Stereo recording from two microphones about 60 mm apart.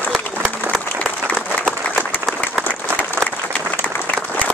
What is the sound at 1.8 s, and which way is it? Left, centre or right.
Applause, left.